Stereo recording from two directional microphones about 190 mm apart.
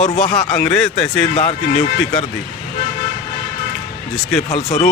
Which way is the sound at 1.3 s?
35° left (ahead or behind).